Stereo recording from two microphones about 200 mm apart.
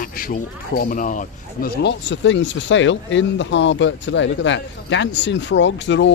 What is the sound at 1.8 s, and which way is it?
Speech, 60° left (ahead or behind).